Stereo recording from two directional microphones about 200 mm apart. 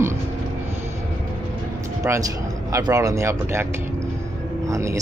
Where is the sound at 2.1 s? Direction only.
10° right (ahead or behind).